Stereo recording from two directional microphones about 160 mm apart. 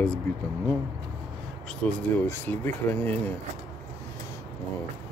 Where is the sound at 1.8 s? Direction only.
15° left (ahead or behind).